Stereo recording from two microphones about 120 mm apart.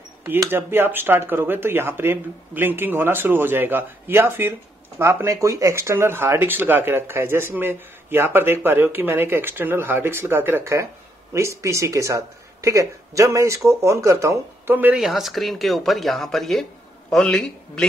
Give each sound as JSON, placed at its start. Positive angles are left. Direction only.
{"t": 0.5, "sound": "speech", "side_deg": -20}
{"t": 15.0, "sound": "speech", "side_deg": 0}